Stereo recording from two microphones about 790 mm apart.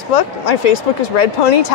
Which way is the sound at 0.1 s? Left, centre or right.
Left.